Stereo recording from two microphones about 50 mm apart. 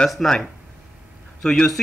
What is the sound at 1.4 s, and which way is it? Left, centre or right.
Speech, centre.